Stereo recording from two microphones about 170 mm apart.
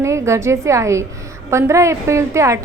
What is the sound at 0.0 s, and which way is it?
A woman's voice, 15° right (ahead or behind).